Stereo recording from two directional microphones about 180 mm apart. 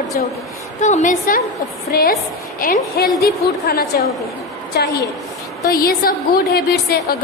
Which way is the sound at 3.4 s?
55° left (ahead or behind).